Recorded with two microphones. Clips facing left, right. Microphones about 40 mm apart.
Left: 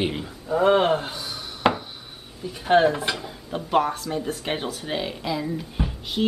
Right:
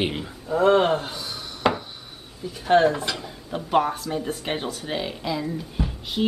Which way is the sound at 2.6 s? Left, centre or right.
Centre.